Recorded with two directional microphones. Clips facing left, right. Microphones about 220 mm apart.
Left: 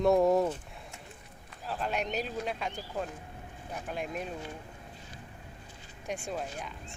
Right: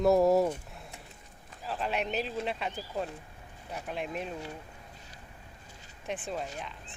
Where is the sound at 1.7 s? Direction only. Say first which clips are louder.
Right 1 dB; centre (ahead or behind).